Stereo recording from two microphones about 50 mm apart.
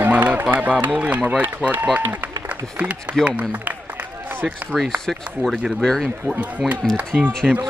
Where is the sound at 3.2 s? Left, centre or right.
Right.